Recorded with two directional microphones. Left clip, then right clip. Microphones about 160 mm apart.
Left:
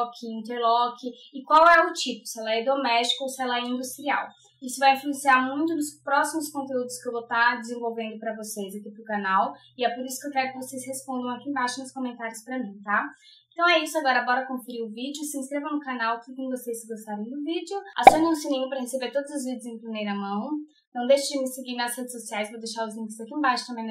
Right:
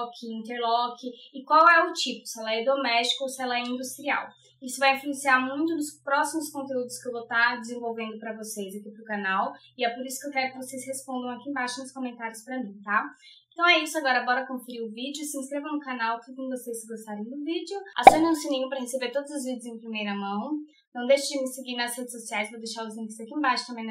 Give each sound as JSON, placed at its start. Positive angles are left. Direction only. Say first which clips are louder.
{"t": 0.4, "sound": "a woman's voice", "louder": "left 3 dB", "side_deg": 0}